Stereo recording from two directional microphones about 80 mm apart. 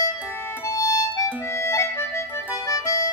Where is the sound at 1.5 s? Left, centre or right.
Left.